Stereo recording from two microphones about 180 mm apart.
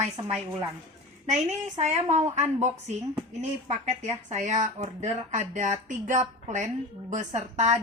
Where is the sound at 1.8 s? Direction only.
40° right (ahead or behind).